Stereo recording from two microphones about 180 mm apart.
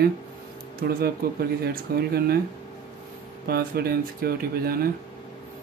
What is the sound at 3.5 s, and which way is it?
Speech, 60° right (ahead or behind).